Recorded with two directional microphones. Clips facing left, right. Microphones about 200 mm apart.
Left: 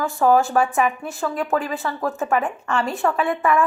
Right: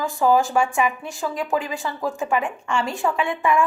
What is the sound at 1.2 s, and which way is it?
Speech, 15° right (ahead or behind).